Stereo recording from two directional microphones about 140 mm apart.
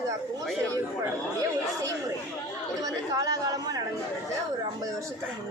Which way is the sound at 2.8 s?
25° right (ahead or behind).